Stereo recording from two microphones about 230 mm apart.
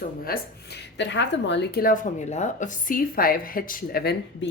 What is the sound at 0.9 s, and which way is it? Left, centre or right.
Speech, left.